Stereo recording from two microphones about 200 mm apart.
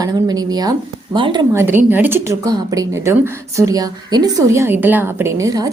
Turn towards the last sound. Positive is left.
turn(degrees=-15)  # may be behind; listen again after turning